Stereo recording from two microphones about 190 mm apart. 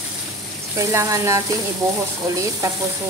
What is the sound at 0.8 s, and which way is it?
Speech, 15° right (ahead or behind).